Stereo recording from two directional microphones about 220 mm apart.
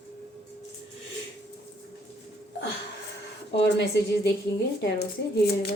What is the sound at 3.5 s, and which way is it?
Speech, 50° left (ahead or behind).